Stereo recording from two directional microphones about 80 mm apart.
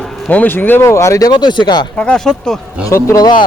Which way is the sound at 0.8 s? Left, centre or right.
Left.